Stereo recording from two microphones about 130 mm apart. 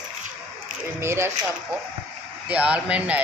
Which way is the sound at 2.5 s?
10° right (ahead or behind).